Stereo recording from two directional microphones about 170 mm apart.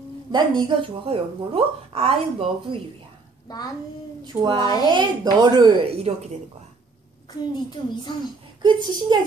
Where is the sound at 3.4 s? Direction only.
25° left (ahead or behind).